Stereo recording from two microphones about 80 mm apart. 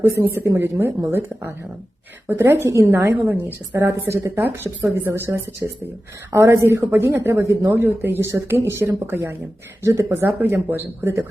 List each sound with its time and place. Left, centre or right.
0.0 s a woman's voice: right
7.7 s a woman's voice: right
10.1 s speech: right